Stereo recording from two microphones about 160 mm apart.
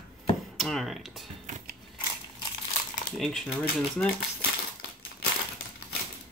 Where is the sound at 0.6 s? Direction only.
Centre (ahead or behind).